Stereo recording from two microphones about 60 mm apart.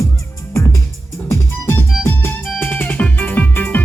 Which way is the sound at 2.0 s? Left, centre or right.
Left.